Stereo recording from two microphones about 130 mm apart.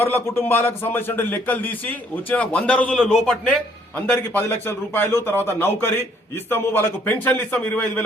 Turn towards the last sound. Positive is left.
turn(degrees=15)  # may be behind; listen again after turning